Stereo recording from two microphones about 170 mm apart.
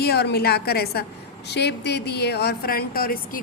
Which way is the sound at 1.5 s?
80° left.